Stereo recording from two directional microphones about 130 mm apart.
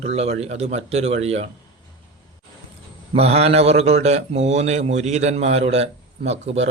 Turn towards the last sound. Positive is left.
turn(degrees=-55)  # may be behind; listen again after turning